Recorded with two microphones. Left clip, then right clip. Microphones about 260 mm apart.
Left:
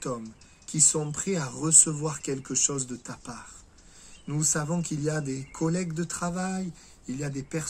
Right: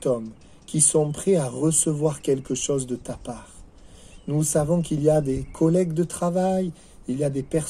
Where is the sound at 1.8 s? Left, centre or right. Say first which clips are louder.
Right 8 dB; left.